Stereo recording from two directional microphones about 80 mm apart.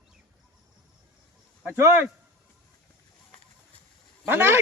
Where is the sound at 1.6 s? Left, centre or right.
Right.